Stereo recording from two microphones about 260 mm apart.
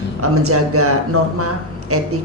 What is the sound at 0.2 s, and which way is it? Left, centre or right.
A woman's voice, right.